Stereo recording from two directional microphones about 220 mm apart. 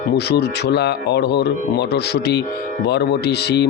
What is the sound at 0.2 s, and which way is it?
Speech, 50° left (ahead or behind).